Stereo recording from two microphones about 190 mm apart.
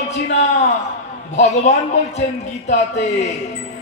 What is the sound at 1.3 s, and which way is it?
A man's voice, 35° left (ahead or behind).